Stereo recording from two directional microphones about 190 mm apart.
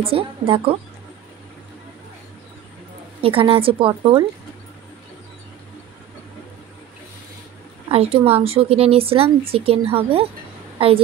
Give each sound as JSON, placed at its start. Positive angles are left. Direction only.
{"t": 0.0, "sound": "a woman's voice", "side_deg": -30}
{"t": 3.2, "sound": "a woman's voice", "side_deg": -30}
{"t": 7.9, "sound": "speech", "side_deg": -30}